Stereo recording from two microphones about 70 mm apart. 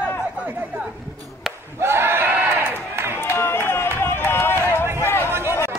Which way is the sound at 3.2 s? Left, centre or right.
Left.